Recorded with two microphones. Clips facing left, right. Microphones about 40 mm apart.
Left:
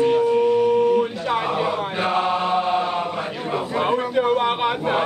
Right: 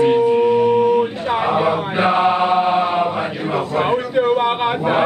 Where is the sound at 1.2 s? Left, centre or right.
Right.